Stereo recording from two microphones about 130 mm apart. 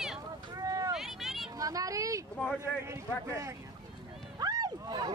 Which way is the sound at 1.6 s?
25° right (ahead or behind).